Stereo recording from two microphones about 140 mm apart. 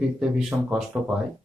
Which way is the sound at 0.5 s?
15° right (ahead or behind).